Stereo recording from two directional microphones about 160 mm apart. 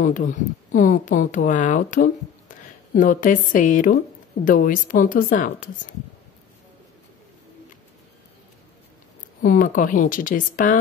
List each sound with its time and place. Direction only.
0.0 s speech: 55° left (ahead or behind)
9.4 s speech: 55° left (ahead or behind)